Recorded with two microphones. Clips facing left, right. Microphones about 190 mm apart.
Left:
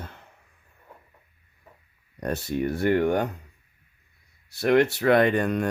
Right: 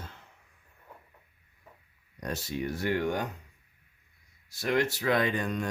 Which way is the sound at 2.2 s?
60° left (ahead or behind).